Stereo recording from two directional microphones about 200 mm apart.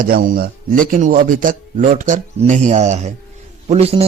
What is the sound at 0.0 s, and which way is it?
A man's voice, 45° right (ahead or behind).